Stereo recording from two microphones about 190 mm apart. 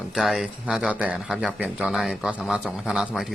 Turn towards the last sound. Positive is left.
turn(degrees=0)  # may be behind; listen again after turning